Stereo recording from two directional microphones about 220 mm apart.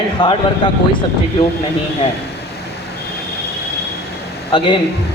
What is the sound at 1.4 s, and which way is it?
Speech, 25° left (ahead or behind).